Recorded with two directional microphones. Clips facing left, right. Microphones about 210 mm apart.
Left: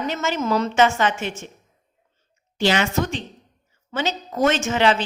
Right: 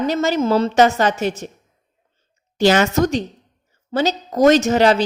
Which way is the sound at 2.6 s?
40° right (ahead or behind).